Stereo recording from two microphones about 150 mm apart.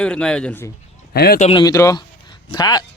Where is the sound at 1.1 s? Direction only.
90° left.